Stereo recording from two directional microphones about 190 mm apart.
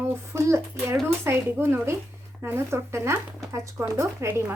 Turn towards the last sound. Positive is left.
turn(degrees=-10)  # may be behind; listen again after turning